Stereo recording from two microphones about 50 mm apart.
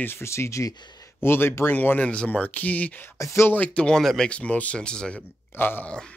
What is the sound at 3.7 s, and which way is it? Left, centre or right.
Speech, left.